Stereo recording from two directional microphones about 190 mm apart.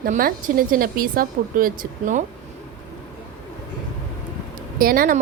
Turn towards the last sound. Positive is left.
turn(degrees=-50)  # may be behind; listen again after turning